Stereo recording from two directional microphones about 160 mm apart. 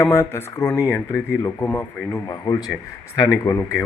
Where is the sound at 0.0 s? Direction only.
15° left (ahead or behind).